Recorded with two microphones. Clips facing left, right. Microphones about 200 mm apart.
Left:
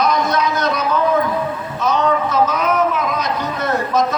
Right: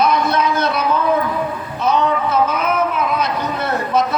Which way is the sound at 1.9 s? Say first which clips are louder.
Even; 40° left (ahead or behind).